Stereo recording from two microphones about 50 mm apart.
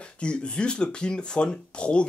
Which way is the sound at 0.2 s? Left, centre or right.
Left.